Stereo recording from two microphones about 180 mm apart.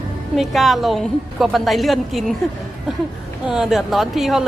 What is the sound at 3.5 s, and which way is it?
Speech, centre (ahead or behind).